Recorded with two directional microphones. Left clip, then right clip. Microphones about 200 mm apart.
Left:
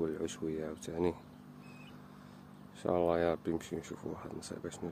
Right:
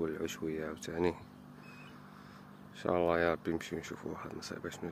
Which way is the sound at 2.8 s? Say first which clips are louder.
Right 1 dB; 5° left (ahead or behind).